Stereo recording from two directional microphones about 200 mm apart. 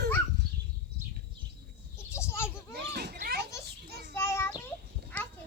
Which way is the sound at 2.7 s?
55° right (ahead or behind).